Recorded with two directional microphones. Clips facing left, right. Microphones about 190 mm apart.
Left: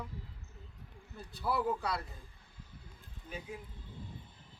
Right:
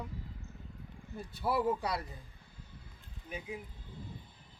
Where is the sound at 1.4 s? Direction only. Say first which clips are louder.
Right 2 dB; 20° right (ahead or behind).